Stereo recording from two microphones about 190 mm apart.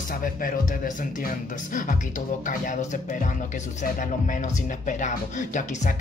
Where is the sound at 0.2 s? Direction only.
45° left (ahead or behind).